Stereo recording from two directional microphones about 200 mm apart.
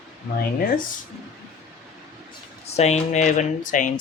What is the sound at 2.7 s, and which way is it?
Speech, 30° left (ahead or behind).